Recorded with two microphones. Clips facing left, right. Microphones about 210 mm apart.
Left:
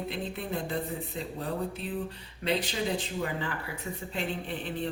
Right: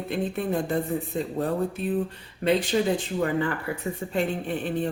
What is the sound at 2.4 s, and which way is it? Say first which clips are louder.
Speech: right 7 dB; 50° right (ahead or behind).